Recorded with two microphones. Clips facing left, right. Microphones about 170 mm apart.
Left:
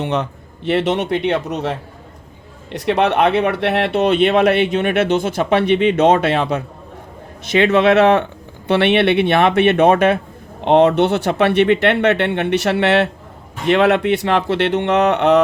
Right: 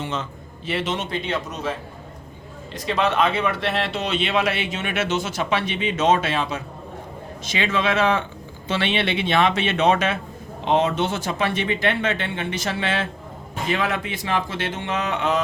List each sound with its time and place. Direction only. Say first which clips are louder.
0.0 s speech: left 8 dB; 65° left (ahead or behind)
2.7 s speech: left 6 dB; 65° left (ahead or behind)